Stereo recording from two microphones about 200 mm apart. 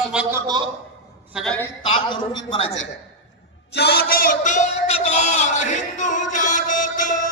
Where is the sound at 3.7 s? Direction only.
55° left (ahead or behind).